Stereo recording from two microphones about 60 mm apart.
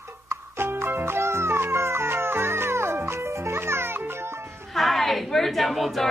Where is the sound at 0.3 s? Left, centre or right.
Right.